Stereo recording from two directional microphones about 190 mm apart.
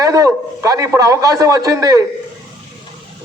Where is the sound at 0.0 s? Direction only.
20° right (ahead or behind).